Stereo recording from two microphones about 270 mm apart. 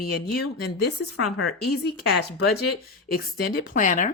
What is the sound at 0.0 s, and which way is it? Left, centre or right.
Speech, left.